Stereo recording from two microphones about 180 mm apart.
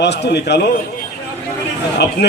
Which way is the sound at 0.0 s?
70° left (ahead or behind).